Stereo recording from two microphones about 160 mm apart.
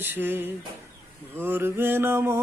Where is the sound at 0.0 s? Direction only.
15° right (ahead or behind).